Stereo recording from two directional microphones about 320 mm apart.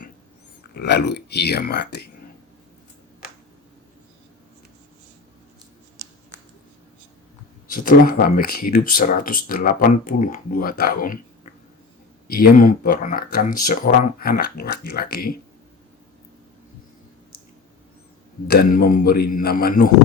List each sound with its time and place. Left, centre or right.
0.7 s speech: left
7.7 s speech: left
12.3 s speech: left
18.4 s speech: left